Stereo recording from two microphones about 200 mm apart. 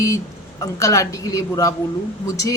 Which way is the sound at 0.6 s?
15° left (ahead or behind).